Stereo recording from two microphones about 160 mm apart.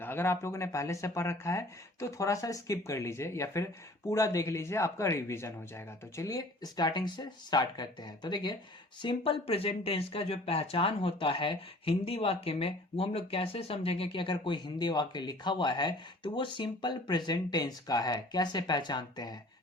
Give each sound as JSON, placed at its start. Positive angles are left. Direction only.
{"t": 0.0, "sound": "speech", "side_deg": 15}